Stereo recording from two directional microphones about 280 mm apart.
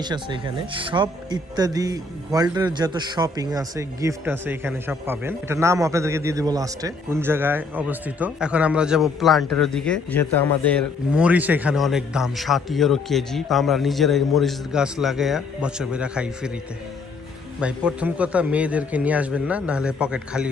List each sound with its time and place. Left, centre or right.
0.0 s speech: centre
17.6 s speech: centre